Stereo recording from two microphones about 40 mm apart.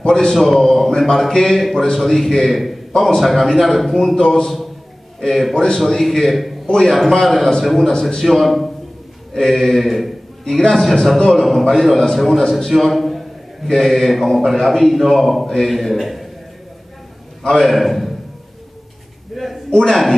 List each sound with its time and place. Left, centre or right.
0.0 s a man's voice: centre
0.3 s a man's voice: centre
2.9 s a man's voice: centre
17.4 s a man's voice: centre
17.6 s a man's voice: centre
19.3 s a sound: centre
19.8 s a man's voice: centre